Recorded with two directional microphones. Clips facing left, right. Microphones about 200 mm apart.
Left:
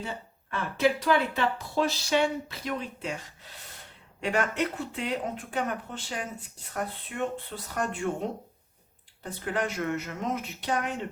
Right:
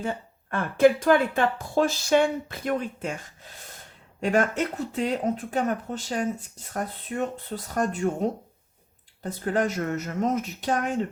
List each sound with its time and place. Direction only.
0.0 s speech: 50° right (ahead or behind)
4.2 s speech: 45° right (ahead or behind)